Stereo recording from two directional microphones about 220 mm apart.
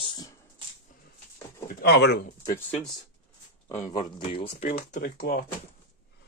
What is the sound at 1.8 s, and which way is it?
Speech, 50° left (ahead or behind).